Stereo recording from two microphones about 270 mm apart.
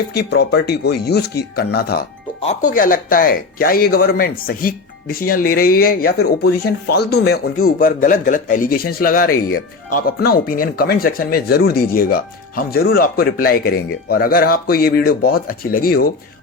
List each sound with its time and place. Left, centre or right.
0.1 s speech: left
9.2 s speech: left
9.9 s speech: left